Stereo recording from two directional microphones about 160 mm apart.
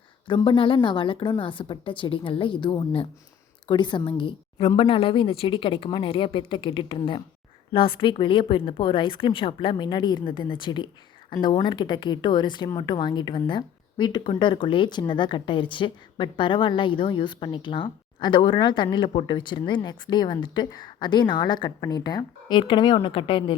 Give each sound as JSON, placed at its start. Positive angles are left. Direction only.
{"t": 0.3, "sound": "a woman's voice", "side_deg": 30}